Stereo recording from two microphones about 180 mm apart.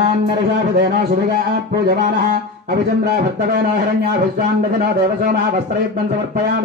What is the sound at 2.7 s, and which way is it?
Speech, 60° right (ahead or behind).